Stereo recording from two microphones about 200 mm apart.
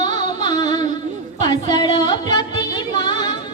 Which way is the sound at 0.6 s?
20° left (ahead or behind).